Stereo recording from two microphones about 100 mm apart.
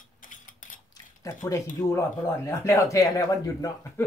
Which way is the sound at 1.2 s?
30° left (ahead or behind).